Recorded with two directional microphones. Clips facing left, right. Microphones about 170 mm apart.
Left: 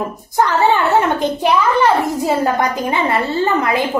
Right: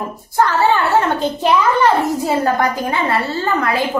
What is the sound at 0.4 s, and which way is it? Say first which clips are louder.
A child's voice: left 1 dB; 20° left (ahead or behind).